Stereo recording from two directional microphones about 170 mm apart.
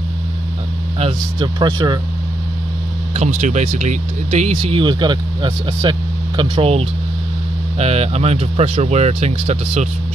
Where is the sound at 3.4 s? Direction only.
45° right (ahead or behind).